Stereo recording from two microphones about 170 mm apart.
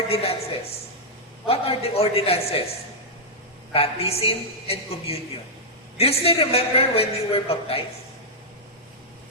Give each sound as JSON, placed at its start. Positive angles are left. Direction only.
{"t": 0.1, "sound": "a man's voice", "side_deg": 35}
{"t": 3.7, "sound": "a man's voice", "side_deg": 35}